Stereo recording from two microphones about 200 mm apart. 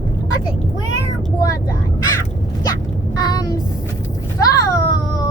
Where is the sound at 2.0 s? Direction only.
15° left (ahead or behind).